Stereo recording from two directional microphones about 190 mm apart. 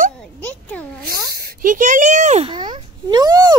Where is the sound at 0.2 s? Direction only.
5° left (ahead or behind).